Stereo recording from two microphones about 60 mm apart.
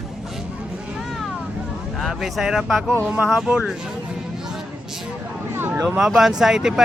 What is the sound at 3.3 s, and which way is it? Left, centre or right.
Speech, centre.